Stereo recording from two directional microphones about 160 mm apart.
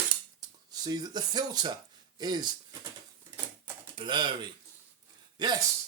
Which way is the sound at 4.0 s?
30° right (ahead or behind).